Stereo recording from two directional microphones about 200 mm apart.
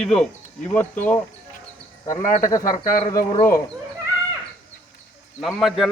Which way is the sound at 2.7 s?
40° left (ahead or behind).